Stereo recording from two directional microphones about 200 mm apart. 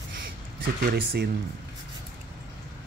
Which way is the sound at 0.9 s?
50° right (ahead or behind).